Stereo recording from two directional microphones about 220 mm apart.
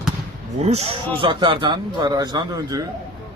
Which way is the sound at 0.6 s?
30° right (ahead or behind).